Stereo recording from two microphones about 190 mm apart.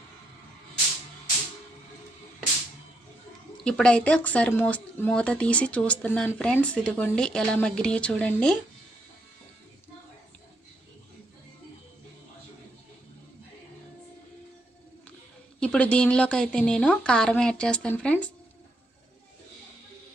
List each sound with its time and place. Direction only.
3.6 s speech: 5° left (ahead or behind)
15.6 s speech: 5° left (ahead or behind)